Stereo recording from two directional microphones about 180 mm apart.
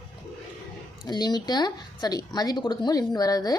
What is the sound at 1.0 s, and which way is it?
Speech, 25° left (ahead or behind).